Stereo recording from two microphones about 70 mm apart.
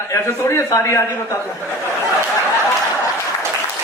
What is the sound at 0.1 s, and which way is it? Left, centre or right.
Speech, left.